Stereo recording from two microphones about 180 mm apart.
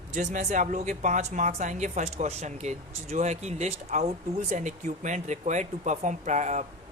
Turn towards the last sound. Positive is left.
turn(degrees=-40)  # may be behind; listen again after turning